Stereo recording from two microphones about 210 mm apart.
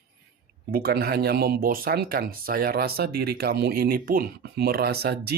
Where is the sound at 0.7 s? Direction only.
45° right (ahead or behind).